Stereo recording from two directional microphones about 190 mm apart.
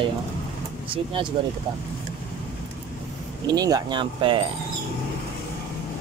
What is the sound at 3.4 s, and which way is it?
Speech, 20° right (ahead or behind).